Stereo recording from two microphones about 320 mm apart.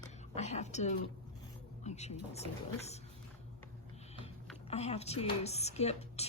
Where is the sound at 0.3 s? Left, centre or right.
Left.